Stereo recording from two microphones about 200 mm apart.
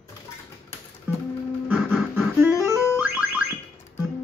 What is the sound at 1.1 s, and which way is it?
Music, 10° right (ahead or behind).